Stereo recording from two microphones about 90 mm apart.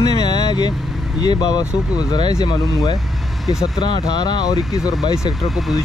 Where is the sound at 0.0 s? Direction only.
45° left (ahead or behind).